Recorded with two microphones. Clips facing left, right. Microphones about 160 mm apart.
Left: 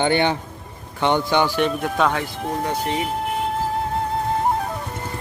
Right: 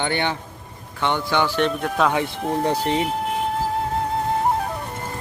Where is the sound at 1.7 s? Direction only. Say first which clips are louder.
Even; centre (ahead or behind).